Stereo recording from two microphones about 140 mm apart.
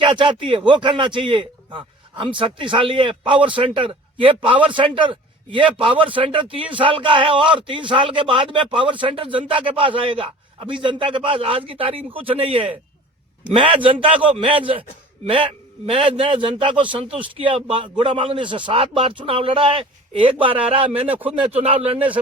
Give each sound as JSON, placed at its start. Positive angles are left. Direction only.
{"t": 0.0, "sound": "a man's voice", "side_deg": -35}